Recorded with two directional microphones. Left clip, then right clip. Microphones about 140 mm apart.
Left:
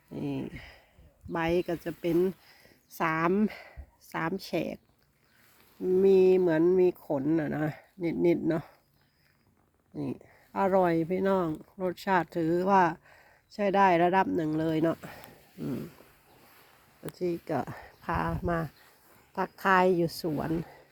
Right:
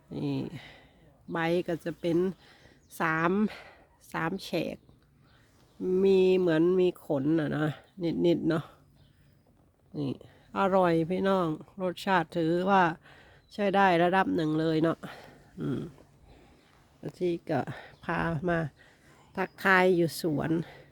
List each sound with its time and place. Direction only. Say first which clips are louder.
0.1 s a sound: right 1 dB; 35° right (ahead or behind)
1.3 s speech: even; 30° right (ahead or behind)
5.8 s speech: left 2 dB; 35° right (ahead or behind)
10.5 s speech: even; 40° right (ahead or behind)
17.0 s speech: right 1 dB; 45° right (ahead or behind)
19.3 s speech: right 1 dB; 40° right (ahead or behind)
20.2 s speech: right 2 dB; 55° right (ahead or behind)